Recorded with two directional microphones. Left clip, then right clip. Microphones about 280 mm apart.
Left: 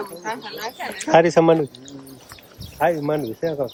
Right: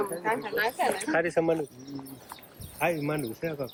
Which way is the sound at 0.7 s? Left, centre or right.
Right.